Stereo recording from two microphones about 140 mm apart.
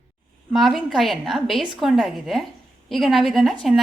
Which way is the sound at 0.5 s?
Centre (ahead or behind).